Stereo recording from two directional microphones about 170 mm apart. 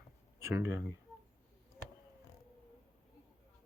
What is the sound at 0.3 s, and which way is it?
Speech, 15° right (ahead or behind).